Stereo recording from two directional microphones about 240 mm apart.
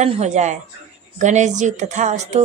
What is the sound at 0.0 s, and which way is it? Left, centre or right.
Speech, right.